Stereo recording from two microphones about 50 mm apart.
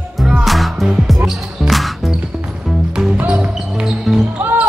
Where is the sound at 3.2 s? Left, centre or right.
Right.